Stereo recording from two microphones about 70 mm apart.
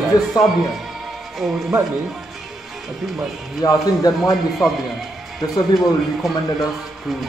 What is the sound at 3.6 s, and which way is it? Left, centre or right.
Speech, left.